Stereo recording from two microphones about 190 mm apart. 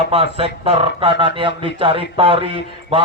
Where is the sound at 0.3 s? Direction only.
30° right (ahead or behind).